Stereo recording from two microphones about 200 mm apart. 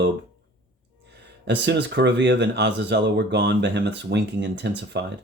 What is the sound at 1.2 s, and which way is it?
Speech, 60° right (ahead or behind).